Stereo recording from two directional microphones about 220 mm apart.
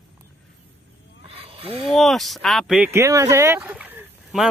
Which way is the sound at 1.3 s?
25° right (ahead or behind).